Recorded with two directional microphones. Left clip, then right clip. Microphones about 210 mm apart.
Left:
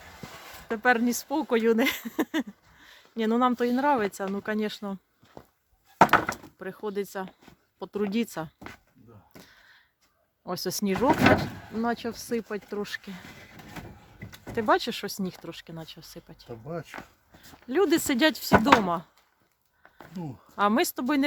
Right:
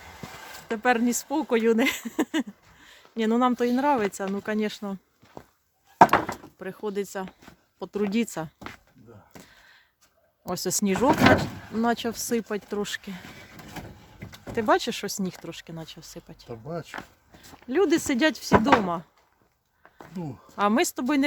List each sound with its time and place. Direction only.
0.7 s speech: centre (ahead or behind)
6.1 s a sound: 35° left (ahead or behind)
6.6 s speech: 5° right (ahead or behind)
9.3 s a sound: 5° right (ahead or behind)
10.4 s speech: 5° right (ahead or behind)
14.3 s speech: centre (ahead or behind)
20.1 s speech: 10° left (ahead or behind)